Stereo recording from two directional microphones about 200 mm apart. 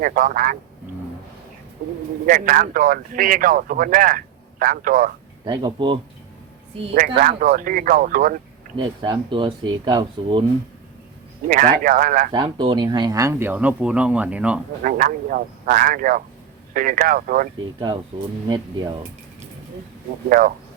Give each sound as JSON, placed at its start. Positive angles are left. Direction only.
{"t": 0.0, "sound": "speech", "side_deg": -45}
{"t": 2.2, "sound": "speech", "side_deg": -45}
{"t": 5.5, "sound": "speech", "side_deg": -25}
{"t": 7.2, "sound": "speech", "side_deg": -45}
{"t": 8.8, "sound": "speech", "side_deg": -25}
{"t": 11.4, "sound": "speech", "side_deg": -40}
{"t": 12.3, "sound": "speech", "side_deg": -25}
{"t": 14.8, "sound": "speech", "side_deg": -45}
{"t": 17.7, "sound": "speech", "side_deg": -20}
{"t": 20.3, "sound": "speech", "side_deg": -45}